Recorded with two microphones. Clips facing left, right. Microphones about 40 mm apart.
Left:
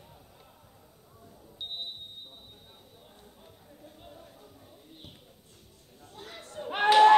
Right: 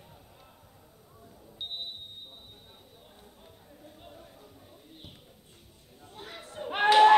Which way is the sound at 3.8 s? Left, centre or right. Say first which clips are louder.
Even; centre.